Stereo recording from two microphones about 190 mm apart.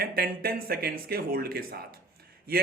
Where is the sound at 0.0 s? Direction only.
55° right (ahead or behind).